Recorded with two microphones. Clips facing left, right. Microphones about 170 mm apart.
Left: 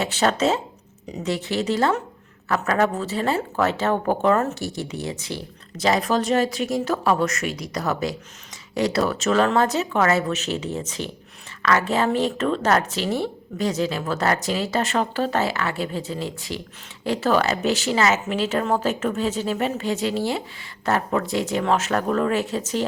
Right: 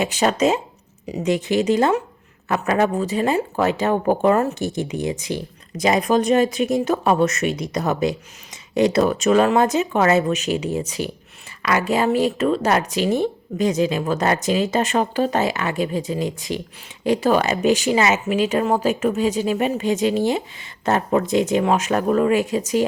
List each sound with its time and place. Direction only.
0.0 s speech: 15° right (ahead or behind)